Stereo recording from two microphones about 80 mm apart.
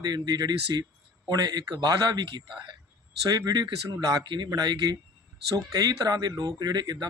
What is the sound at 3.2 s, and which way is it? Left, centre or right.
Speech, right.